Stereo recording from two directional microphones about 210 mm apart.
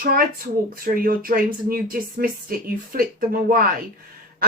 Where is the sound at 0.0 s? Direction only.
45° right (ahead or behind).